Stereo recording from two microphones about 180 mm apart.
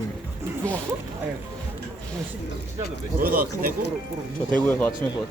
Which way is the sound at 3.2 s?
50° right (ahead or behind).